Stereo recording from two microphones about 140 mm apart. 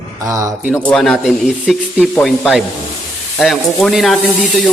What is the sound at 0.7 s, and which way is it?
Speech, 10° left (ahead or behind).